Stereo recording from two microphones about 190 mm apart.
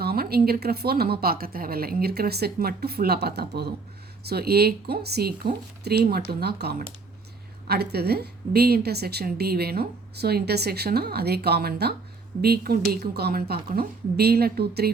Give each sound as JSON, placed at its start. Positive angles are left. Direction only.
{"t": 0.0, "sound": "a woman's voice", "side_deg": -55}